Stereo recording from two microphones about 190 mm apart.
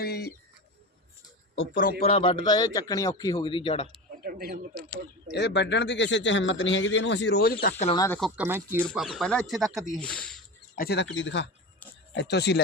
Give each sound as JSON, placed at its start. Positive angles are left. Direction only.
{"t": 0.0, "sound": "bird", "side_deg": 55}
{"t": 1.7, "sound": "a man's voice", "side_deg": 45}
{"t": 2.0, "sound": "a man's voice", "side_deg": 30}
{"t": 4.2, "sound": "speech", "side_deg": -50}
{"t": 5.3, "sound": "a man's voice", "side_deg": 65}
{"t": 7.9, "sound": "speech", "side_deg": 15}
{"t": 8.2, "sound": "speech", "side_deg": -10}
{"t": 8.8, "sound": "speech", "side_deg": 0}
{"t": 10.8, "sound": "a man's voice", "side_deg": 60}
{"t": 12.1, "sound": "speech", "side_deg": 65}